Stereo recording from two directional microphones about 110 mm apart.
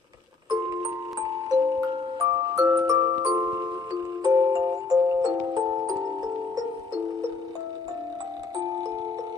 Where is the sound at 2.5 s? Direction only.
30° right (ahead or behind).